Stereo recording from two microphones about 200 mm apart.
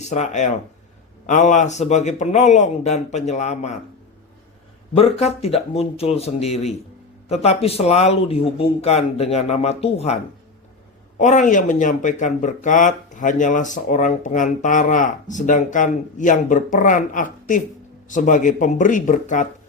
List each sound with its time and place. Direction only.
0.0 s speech: 35° left (ahead or behind)
4.9 s speech: 30° left (ahead or behind)
11.2 s speech: 40° left (ahead or behind)